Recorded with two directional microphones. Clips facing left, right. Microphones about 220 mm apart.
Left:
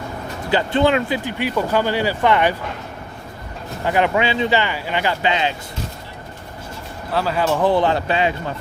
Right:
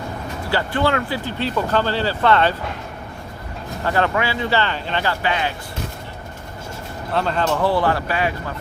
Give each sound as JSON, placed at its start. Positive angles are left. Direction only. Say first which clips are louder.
{"t": 0.5, "sound": "speech", "louder": "left 4 dB", "side_deg": 20}
{"t": 3.8, "sound": "speech", "louder": "left 2 dB", "side_deg": 15}
{"t": 7.1, "sound": "speech", "louder": "left 1 dB", "side_deg": 5}
{"t": 7.4, "sound": "speech", "louder": "left 3 dB", "side_deg": 15}